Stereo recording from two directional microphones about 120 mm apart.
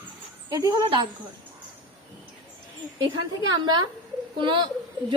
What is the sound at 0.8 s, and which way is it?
Speech, 40° right (ahead or behind).